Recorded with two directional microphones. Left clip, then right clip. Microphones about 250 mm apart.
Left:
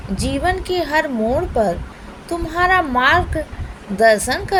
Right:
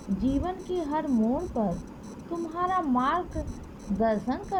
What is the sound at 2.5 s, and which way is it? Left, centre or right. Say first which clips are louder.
A woman's voice: left 12 dB; right.